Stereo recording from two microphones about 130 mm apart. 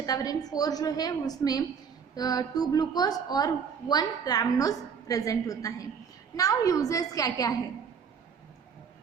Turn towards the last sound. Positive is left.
turn(degrees=25)  # may be behind; listen again after turning